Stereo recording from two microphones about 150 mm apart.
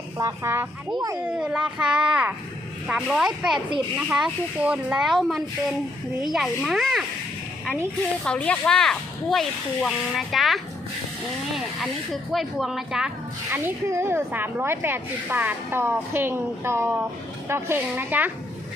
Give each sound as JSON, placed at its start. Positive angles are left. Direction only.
{"t": 0.2, "sound": "a child's voice", "side_deg": -20}
{"t": 1.3, "sound": "speech", "side_deg": -5}
{"t": 8.2, "sound": "speech", "side_deg": 5}
{"t": 12.3, "sound": "speech", "side_deg": 0}
{"t": 13.5, "sound": "speech", "side_deg": -15}